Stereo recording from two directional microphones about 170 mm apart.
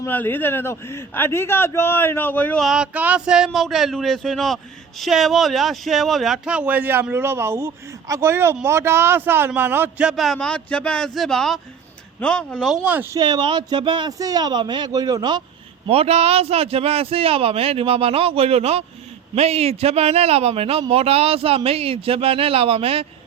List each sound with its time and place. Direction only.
0.0 s a man's voice: 10° left (ahead or behind)
2.6 s speech: 5° right (ahead or behind)
13.1 s speech: 25° right (ahead or behind)
15.9 s a man's voice: 35° right (ahead or behind)